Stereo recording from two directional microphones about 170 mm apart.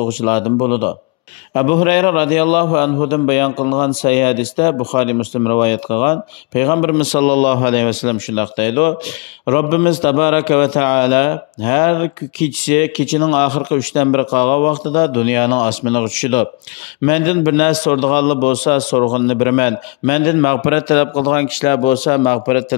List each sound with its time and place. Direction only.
0.0 s a man's voice: 30° left (ahead or behind)
20.7 s a man's voice: 25° left (ahead or behind)
22.0 s a man's voice: 55° left (ahead or behind)